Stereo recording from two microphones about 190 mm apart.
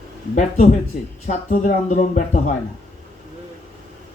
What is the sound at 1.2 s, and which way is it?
Speech, 40° left (ahead or behind).